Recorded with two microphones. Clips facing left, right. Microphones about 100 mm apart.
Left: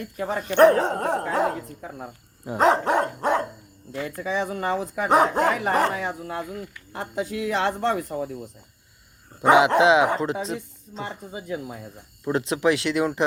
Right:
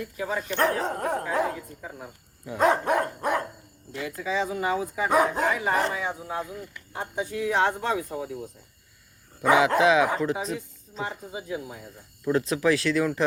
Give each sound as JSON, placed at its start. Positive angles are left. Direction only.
{"t": 0.2, "sound": "speech", "side_deg": 55}
{"t": 1.0, "sound": "speech", "side_deg": 75}
{"t": 1.8, "sound": "speech", "side_deg": 50}
{"t": 2.5, "sound": "speech", "side_deg": 30}
{"t": 2.9, "sound": "dog", "side_deg": 25}
{"t": 4.0, "sound": "speech", "side_deg": 50}
{"t": 7.0, "sound": "speech", "side_deg": 85}
{"t": 9.4, "sound": "speech", "side_deg": 25}
{"t": 12.2, "sound": "speech", "side_deg": 25}